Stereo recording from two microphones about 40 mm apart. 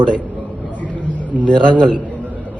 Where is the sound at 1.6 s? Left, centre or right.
Left.